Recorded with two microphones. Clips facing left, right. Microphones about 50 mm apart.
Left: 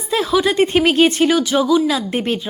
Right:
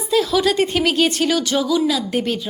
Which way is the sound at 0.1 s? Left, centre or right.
Left.